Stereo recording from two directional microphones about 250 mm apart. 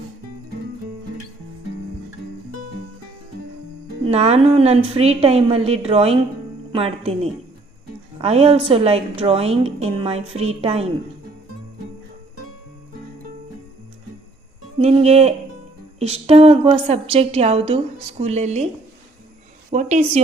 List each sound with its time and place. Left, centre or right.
4.0 s a woman's voice: right
14.8 s a woman's voice: right
19.7 s a woman's voice: right